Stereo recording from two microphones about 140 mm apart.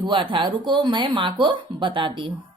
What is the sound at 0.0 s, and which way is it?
A woman's voice, 35° right (ahead or behind).